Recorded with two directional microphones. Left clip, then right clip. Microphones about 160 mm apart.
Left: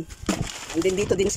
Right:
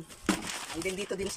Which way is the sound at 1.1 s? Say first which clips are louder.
Left 13 dB; 55° left (ahead or behind).